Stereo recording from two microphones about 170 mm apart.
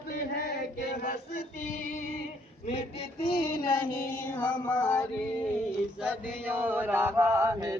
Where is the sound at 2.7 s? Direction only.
35° left (ahead or behind).